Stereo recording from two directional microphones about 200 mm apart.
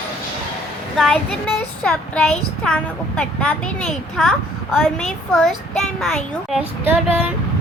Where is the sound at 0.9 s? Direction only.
5° left (ahead or behind).